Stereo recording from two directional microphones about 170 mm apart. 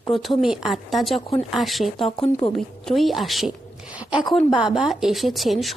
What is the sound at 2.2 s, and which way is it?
Speech, 35° left (ahead or behind).